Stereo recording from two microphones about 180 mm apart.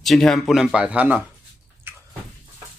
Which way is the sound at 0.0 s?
Centre (ahead or behind).